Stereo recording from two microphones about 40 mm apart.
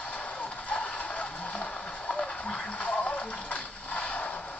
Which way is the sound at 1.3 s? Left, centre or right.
Left.